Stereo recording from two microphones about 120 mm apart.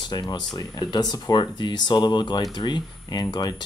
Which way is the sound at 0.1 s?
35° left (ahead or behind).